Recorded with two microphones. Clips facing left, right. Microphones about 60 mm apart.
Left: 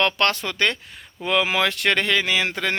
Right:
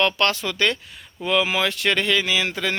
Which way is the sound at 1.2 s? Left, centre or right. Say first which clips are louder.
Even; left.